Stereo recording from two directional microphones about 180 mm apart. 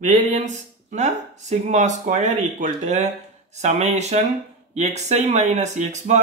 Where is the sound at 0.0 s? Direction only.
40° right (ahead or behind).